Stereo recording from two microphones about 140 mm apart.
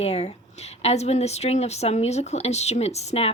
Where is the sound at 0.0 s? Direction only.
50° left (ahead or behind).